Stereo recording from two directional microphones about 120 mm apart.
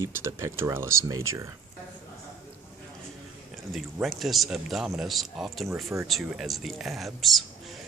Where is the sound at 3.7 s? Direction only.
Centre (ahead or behind).